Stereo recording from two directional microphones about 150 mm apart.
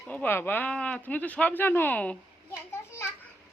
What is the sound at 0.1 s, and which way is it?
Speech, 10° left (ahead or behind).